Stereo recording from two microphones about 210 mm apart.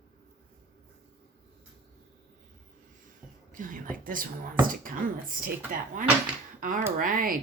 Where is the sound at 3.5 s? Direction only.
40° right (ahead or behind).